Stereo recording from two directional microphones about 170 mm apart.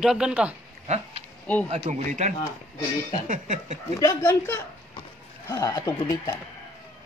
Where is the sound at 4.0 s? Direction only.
20° left (ahead or behind).